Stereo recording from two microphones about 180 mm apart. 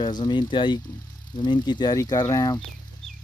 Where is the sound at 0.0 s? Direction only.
25° left (ahead or behind).